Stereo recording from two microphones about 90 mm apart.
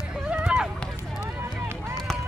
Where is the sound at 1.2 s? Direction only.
30° right (ahead or behind).